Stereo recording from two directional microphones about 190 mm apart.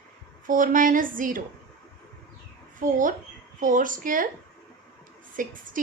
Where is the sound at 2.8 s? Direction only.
45° right (ahead or behind).